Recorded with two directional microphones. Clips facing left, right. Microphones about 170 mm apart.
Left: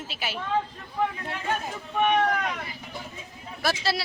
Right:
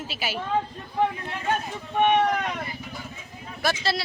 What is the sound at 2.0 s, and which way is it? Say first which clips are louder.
Speech: right 2 dB; 25° right (ahead or behind).